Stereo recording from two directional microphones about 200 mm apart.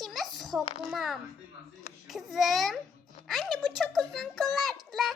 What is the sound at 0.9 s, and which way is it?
A child's voice, centre (ahead or behind).